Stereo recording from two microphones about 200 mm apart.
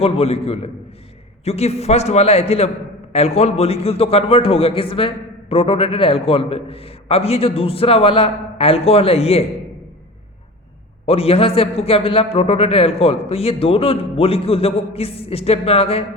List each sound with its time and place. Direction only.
0.0 s a man's voice: 30° left (ahead or behind)
11.0 s a man's voice: 30° left (ahead or behind)